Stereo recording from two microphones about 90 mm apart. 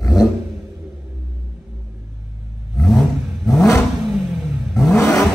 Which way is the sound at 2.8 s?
5° left (ahead or behind).